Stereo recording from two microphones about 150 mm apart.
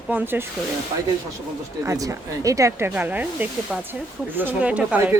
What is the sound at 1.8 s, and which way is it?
A woman's voice, 20° right (ahead or behind).